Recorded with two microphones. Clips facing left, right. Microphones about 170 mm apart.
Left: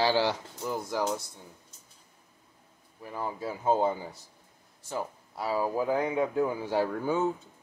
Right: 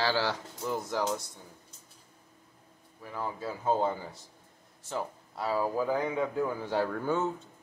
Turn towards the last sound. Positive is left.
turn(degrees=10)  # may be behind; listen again after turning